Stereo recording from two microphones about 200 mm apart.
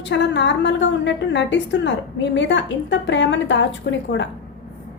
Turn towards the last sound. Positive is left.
turn(degrees=65)  # may be behind; listen again after turning